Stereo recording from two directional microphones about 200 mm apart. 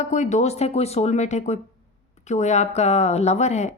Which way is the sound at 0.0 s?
35° left (ahead or behind).